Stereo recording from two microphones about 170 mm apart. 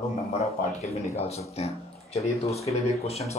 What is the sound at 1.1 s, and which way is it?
Speech, 40° left (ahead or behind).